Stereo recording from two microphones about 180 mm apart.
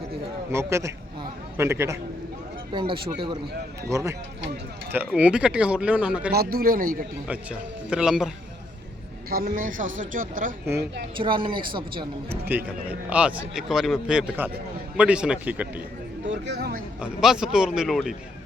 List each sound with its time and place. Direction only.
0.5 s speech: 15° right (ahead or behind)
2.7 s speech: 30° right (ahead or behind)
3.8 s speech: 15° right (ahead or behind)
6.3 s speech: 60° right (ahead or behind)
7.3 s a man's voice: 5° right (ahead or behind)
9.3 s speech: 55° right (ahead or behind)
11.2 s speech: 25° right (ahead or behind)
12.3 s a man's voice: 10° right (ahead or behind)
16.2 s speech: 75° right (ahead or behind)
17.0 s a man's voice: 5° right (ahead or behind)